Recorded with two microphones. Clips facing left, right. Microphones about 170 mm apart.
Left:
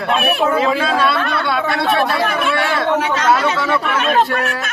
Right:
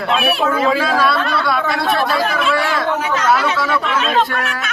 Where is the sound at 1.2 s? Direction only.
60° left (ahead or behind).